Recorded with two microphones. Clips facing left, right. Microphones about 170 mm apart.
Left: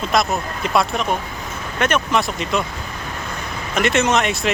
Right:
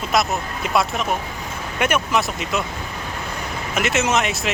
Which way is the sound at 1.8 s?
5° right (ahead or behind).